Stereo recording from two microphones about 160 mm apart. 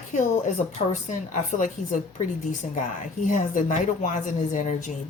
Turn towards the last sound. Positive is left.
turn(degrees=50)  # may be behind; listen again after turning